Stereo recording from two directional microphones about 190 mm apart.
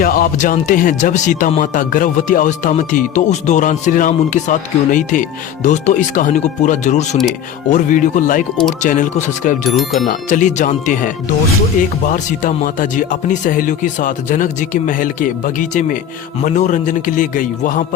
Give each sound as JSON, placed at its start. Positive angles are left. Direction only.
{"t": 0.0, "sound": "speech", "side_deg": 50}
{"t": 9.7, "sound": "speech", "side_deg": 0}
{"t": 10.1, "sound": "speech", "side_deg": 40}